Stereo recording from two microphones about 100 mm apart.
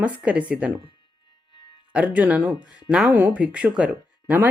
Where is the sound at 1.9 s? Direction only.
15° right (ahead or behind).